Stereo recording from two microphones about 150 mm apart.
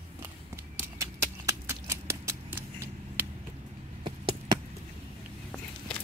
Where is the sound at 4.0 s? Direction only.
30° right (ahead or behind).